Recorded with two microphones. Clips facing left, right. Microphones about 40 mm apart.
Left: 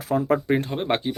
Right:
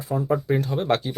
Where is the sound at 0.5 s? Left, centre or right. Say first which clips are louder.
Right 1 dB; left.